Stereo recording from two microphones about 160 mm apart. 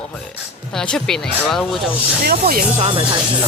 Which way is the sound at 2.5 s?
60° right (ahead or behind).